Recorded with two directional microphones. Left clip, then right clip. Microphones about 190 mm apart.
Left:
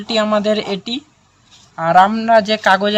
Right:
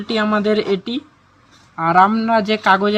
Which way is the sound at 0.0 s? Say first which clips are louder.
Left 2 dB; 35° left (ahead or behind).